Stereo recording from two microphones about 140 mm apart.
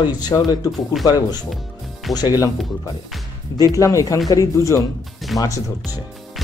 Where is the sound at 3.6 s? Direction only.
25° left (ahead or behind).